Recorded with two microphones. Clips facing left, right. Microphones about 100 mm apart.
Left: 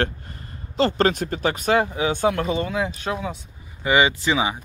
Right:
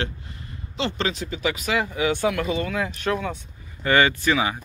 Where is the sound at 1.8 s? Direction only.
25° left (ahead or behind).